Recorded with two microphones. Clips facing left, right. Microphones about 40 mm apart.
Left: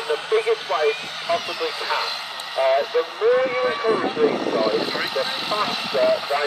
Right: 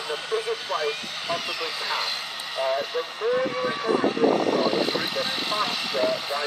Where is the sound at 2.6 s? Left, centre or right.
Centre.